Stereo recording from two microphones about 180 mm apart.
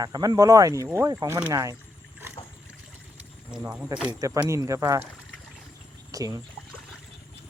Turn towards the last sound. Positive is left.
turn(degrees=-20)  # may be behind; listen again after turning